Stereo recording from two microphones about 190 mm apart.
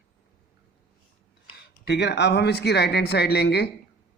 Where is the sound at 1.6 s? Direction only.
60° left (ahead or behind).